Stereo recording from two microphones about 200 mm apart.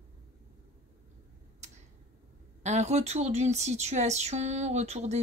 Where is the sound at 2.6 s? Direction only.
35° right (ahead or behind).